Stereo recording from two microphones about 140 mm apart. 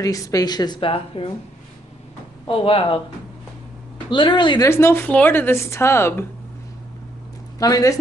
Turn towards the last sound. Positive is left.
turn(degrees=25)  # may be behind; listen again after turning